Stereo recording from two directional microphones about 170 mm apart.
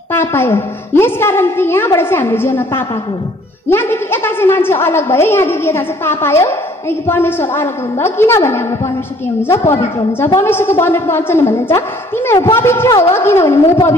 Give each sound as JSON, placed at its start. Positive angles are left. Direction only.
{"t": 0.1, "sound": "a woman's voice", "side_deg": 15}